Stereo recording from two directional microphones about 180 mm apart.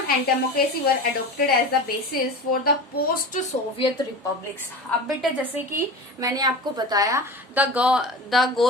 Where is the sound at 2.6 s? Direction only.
55° left (ahead or behind).